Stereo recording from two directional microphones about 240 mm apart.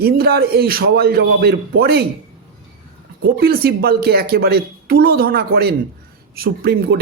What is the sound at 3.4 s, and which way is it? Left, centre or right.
Speech, right.